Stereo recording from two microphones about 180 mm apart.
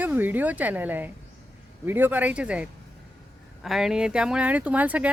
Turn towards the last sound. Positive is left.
turn(degrees=-10)  # may be behind; listen again after turning